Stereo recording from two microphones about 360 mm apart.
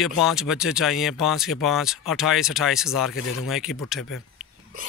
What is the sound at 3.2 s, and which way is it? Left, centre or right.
Speech, left.